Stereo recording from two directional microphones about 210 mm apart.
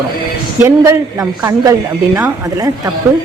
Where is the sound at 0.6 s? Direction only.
15° right (ahead or behind).